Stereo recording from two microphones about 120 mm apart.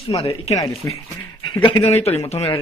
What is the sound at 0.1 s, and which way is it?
Speech, 55° left (ahead or behind).